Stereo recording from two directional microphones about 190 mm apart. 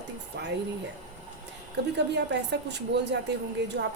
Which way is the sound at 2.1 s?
65° right (ahead or behind).